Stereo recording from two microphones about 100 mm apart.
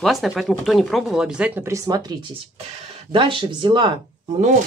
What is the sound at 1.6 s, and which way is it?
Speech, 35° right (ahead or behind).